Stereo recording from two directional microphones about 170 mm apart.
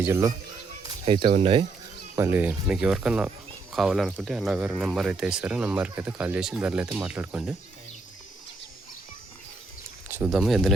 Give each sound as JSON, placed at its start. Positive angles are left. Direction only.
{"t": 0.0, "sound": "speech", "side_deg": -15}
{"t": 1.0, "sound": "speech", "side_deg": -30}
{"t": 2.1, "sound": "speech", "side_deg": -15}
{"t": 10.1, "sound": "speech", "side_deg": -5}